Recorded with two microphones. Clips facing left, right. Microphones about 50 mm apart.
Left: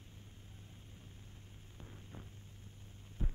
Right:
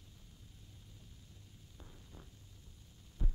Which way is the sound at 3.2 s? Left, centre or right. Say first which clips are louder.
Left 2 dB; left.